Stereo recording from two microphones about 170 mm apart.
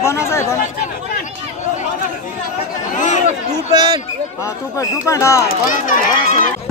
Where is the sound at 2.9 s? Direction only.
45° left (ahead or behind).